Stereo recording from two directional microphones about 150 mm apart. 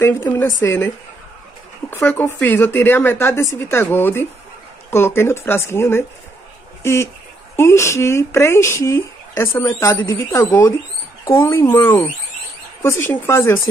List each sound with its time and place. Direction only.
0.0 s speech: 15° left (ahead or behind)
11.2 s speech: 25° left (ahead or behind)